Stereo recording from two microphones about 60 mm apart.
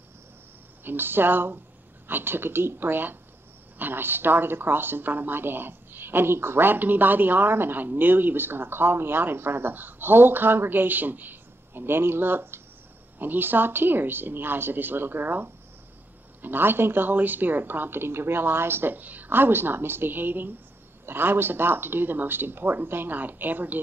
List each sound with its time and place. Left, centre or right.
0.8 s a woman's voice: right